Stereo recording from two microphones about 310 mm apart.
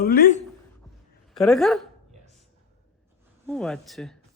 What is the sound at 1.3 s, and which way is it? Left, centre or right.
Speech, centre.